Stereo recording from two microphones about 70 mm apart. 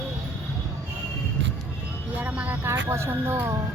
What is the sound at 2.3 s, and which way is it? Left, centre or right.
Vehicle, centre.